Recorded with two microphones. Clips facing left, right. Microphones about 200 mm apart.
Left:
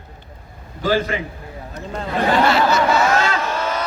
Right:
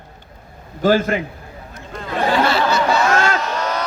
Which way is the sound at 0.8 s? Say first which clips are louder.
Right 4 dB; 45° right (ahead or behind).